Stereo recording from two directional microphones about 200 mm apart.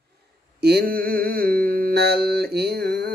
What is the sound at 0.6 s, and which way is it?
Mantra, 55° right (ahead or behind).